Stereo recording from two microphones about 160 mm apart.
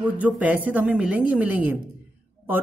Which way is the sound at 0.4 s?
10° right (ahead or behind).